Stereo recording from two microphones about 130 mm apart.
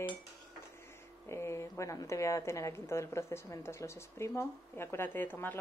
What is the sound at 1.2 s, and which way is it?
A woman's voice, 20° left (ahead or behind).